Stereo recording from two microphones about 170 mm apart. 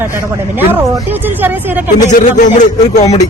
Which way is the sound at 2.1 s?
45° left (ahead or behind).